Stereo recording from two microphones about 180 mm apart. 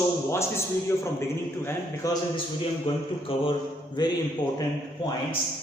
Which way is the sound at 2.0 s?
20° left (ahead or behind).